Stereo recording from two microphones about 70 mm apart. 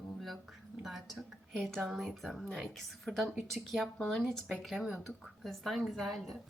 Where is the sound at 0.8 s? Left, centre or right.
Centre.